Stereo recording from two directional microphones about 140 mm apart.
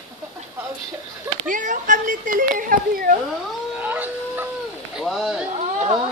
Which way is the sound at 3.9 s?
15° right (ahead or behind).